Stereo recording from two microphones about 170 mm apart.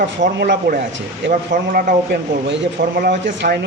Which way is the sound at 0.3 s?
75° right (ahead or behind).